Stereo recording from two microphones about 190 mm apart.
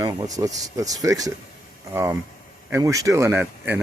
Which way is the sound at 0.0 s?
20° right (ahead or behind).